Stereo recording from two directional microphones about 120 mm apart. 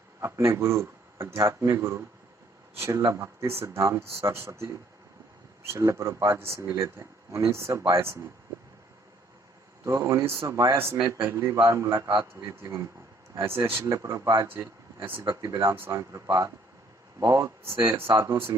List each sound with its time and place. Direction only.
0.2 s speech: 25° right (ahead or behind)
9.8 s speech: 25° right (ahead or behind)
15.2 s speech: 30° right (ahead or behind)